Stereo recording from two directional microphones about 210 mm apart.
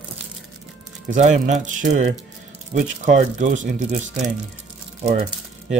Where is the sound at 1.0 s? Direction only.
35° right (ahead or behind).